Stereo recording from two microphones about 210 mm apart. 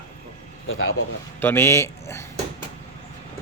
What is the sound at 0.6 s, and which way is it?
Speech, 75° left (ahead or behind).